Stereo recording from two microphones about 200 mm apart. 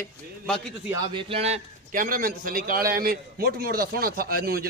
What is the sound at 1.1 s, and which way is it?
A man's voice, 30° right (ahead or behind).